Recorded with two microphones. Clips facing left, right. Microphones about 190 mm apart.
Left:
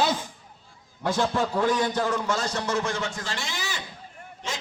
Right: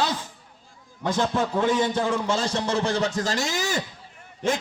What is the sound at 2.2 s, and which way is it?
A man's voice, 30° right (ahead or behind).